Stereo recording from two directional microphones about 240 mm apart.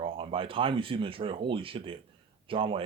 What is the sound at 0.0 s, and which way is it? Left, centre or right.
Speech, right.